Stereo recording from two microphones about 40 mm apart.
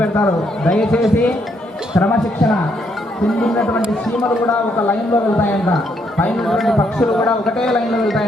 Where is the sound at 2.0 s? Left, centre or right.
Left.